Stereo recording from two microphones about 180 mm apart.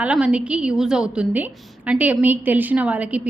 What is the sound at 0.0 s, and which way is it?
A woman's voice, 5° right (ahead or behind).